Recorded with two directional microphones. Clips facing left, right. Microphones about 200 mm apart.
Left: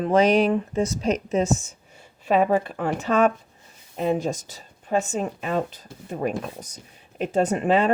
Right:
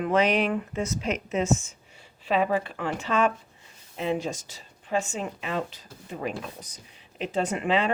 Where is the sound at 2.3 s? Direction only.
45° left (ahead or behind).